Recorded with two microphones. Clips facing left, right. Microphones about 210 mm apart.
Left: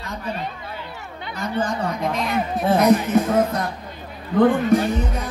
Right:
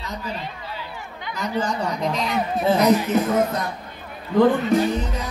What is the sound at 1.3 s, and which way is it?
Speech, 55° left (ahead or behind).